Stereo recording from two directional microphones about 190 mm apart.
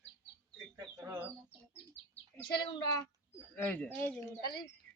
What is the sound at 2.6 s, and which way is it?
Speech, 20° left (ahead or behind).